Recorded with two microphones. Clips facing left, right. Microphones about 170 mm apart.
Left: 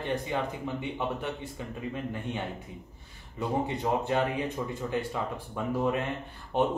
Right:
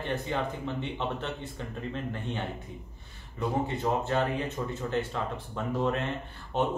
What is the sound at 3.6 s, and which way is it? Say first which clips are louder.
Speech: even; 15° left (ahead or behind).